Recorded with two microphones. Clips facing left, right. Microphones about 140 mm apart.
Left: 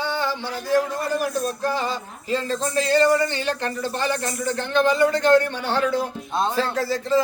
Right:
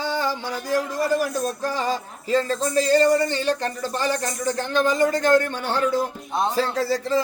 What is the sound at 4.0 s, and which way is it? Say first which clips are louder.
A man's voice: right 2 dB; 40° right (ahead or behind).